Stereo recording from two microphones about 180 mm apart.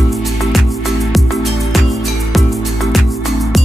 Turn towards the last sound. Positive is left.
turn(degrees=0)  # may be behind; listen again after turning